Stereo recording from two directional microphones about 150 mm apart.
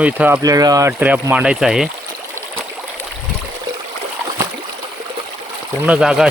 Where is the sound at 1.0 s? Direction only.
10° right (ahead or behind).